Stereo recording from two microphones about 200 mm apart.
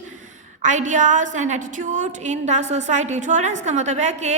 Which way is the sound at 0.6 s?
35° right (ahead or behind).